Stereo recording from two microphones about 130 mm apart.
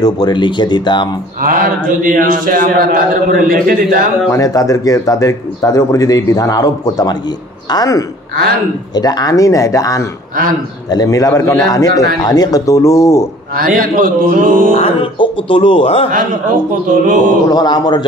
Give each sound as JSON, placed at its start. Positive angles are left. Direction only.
{"t": 0.0, "sound": "speech", "side_deg": 35}
{"t": 1.4, "sound": "speech", "side_deg": -90}
{"t": 4.3, "sound": "speech", "side_deg": 25}
{"t": 13.6, "sound": "speech", "side_deg": -90}
{"t": 14.8, "sound": "speech", "side_deg": 45}
{"t": 16.9, "sound": "speech", "side_deg": -90}
{"t": 17.5, "sound": "speech", "side_deg": 30}